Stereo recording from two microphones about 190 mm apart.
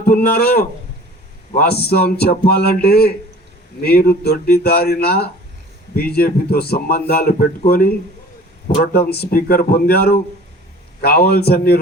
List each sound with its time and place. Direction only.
0.0 s a man's voice: 55° left (ahead or behind)